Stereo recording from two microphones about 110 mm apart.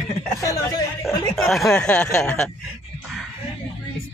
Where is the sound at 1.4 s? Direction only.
Centre (ahead or behind).